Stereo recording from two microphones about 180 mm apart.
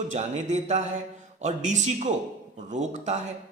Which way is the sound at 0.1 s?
40° right (ahead or behind).